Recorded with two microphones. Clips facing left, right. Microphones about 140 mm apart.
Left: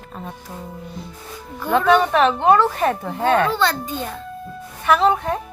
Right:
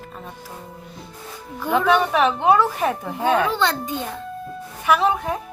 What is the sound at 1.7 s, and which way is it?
A woman's voice, 10° right (ahead or behind).